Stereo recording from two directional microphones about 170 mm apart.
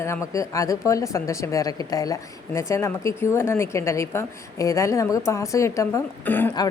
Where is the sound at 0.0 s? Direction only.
15° left (ahead or behind).